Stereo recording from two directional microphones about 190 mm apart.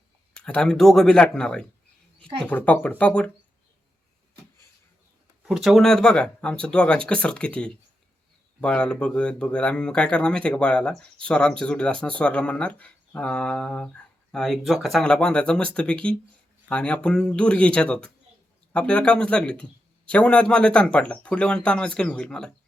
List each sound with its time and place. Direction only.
0.3 s speech: 5° left (ahead or behind)
5.4 s speech: centre (ahead or behind)